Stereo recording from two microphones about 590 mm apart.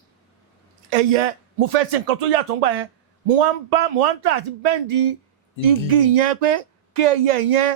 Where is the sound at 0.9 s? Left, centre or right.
Right.